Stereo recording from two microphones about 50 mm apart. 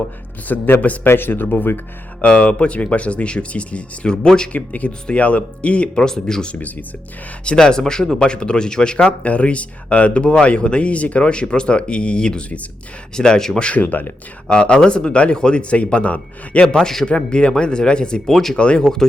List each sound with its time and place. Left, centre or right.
0.4 s speech: left
1.0 s speech: left
2.2 s speech: left
4.5 s speech: left
6.5 s speech: left
7.4 s speech: centre
13.7 s speech: left
14.5 s speech: centre
16.6 s speech: centre
18.3 s speech: centre
18.5 s speech: left